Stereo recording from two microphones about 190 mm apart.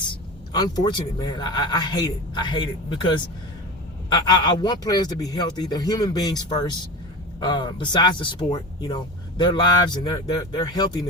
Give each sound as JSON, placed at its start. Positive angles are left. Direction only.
{"t": 0.5, "sound": "speech", "side_deg": 20}